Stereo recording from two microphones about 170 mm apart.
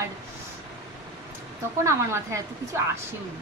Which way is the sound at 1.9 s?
15° right (ahead or behind).